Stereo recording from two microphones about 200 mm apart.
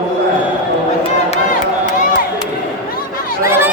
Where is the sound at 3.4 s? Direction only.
10° right (ahead or behind).